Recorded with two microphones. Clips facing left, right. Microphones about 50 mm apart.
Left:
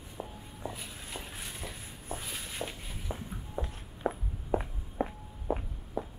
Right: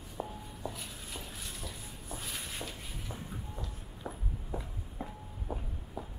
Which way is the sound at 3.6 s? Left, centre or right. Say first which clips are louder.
Left 8 dB; left.